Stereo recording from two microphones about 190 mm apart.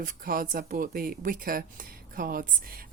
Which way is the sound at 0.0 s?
45° right (ahead or behind).